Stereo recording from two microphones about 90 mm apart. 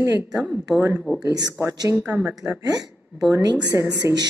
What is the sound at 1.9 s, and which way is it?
Speech, 25° right (ahead or behind).